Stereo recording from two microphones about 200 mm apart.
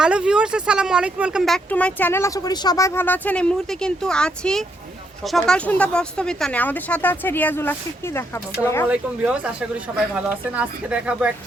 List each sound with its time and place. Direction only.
0.0 s speech: 5° right (ahead or behind); by 8.9 s 15° left (ahead or behind)
8.9 s speech: 5° right (ahead or behind)